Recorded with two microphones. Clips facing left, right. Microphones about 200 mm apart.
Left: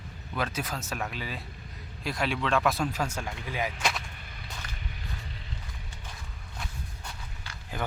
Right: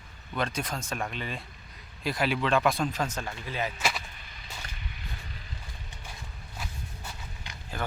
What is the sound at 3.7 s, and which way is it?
Speech, centre (ahead or behind).